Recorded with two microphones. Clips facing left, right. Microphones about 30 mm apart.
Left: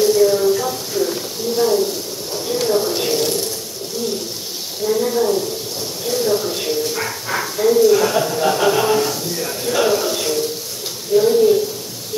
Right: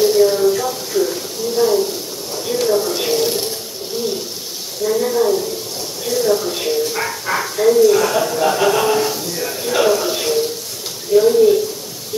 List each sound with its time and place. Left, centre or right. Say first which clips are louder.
0.0 s a sound: right 1 dB; centre
3.0 s water: right 1 dB; centre
3.9 s bird: right 2 dB; centre
4.8 s a sound: right 1 dB; centre
6.0 s bow-wow: right 2 dB; centre
11.1 s frying: right 2 dB; centre